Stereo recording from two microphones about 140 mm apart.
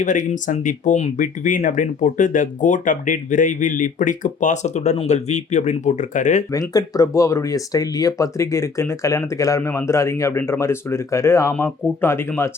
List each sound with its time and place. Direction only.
0.0 s speech: 65° left (ahead or behind)
6.5 s speech: 25° left (ahead or behind)